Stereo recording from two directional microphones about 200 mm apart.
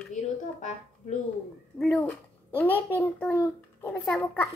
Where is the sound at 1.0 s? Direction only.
35° left (ahead or behind).